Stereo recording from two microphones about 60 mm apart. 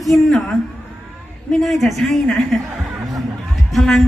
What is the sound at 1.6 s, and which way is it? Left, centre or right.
Speech, centre.